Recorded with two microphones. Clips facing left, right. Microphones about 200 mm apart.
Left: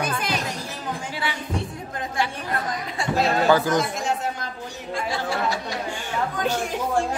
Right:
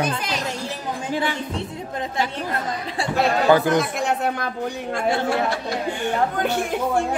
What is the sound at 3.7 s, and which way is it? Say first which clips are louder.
Speech: right 2 dB; 60° right (ahead or behind).